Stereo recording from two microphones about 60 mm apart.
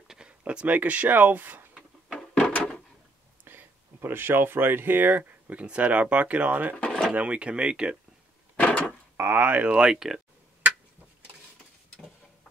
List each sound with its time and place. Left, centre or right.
0.1 s a sound: centre
0.4 s speech: right
2.1 s drawer open or close: left
3.4 s speech: right; by 8.0 s centre
8.5 s a sound: left
9.1 s speech: right; by 10.2 s centre